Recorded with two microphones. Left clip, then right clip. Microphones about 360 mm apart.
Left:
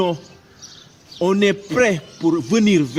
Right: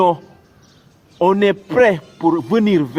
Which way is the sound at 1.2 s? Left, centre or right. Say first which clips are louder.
Right 3 dB; right.